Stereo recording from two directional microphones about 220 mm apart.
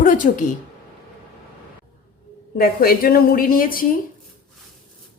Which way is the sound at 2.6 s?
40° left (ahead or behind).